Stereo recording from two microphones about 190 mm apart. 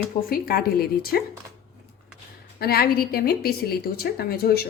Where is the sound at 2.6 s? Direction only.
55° left (ahead or behind).